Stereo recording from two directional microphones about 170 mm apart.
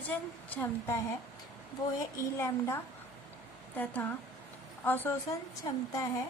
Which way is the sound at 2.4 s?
15° left (ahead or behind).